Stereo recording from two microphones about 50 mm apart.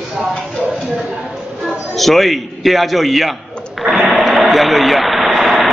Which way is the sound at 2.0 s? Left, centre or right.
Centre.